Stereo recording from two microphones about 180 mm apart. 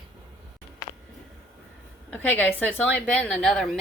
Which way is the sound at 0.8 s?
20° left (ahead or behind).